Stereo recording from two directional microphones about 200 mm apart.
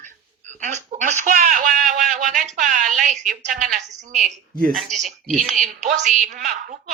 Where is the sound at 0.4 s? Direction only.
35° right (ahead or behind).